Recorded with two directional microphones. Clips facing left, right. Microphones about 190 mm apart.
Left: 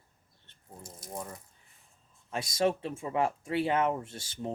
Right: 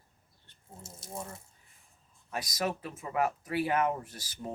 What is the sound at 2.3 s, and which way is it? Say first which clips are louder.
Speech: left 5 dB; 25° left (ahead or behind).